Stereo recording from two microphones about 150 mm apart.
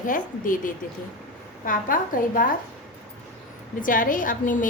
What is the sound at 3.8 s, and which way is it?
Speech, 65° left (ahead or behind).